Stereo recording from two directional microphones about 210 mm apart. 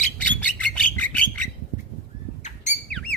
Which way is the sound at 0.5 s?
5° left (ahead or behind).